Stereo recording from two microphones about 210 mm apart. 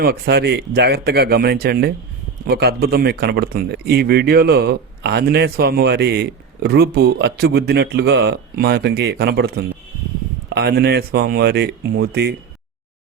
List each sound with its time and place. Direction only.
0.0 s speech: 50° right (ahead or behind)